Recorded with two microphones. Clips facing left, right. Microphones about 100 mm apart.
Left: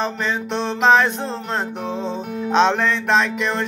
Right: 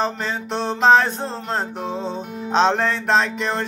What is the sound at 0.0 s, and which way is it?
Music, 40° right (ahead or behind).